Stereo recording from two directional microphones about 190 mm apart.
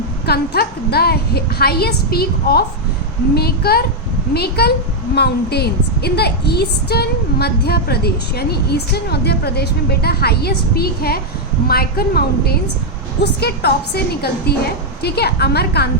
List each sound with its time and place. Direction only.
0.3 s a woman's voice: 55° left (ahead or behind)